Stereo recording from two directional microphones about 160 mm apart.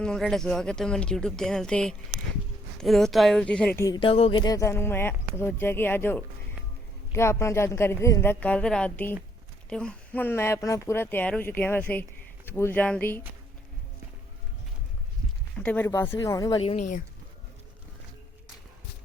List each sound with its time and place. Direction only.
0.0 s speech: 5° left (ahead or behind)
3.8 s speech: 20° left (ahead or behind)
4.0 s speech: 35° left (ahead or behind); by 13.2 s 10° left (ahead or behind)
15.5 s speech: 5° left (ahead or behind); by 16.6 s 25° left (ahead or behind)
16.6 s speech: 50° left (ahead or behind)